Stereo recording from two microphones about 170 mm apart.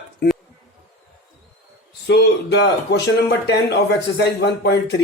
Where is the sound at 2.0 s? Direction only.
85° left.